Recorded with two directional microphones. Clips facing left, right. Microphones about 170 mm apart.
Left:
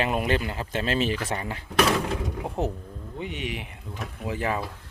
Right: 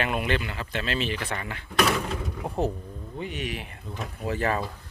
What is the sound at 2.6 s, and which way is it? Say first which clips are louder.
Speech: right 3 dB; 20° left (ahead or behind).